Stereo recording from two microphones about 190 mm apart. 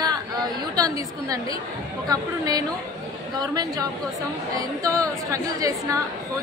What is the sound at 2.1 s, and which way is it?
A woman's voice, 20° right (ahead or behind).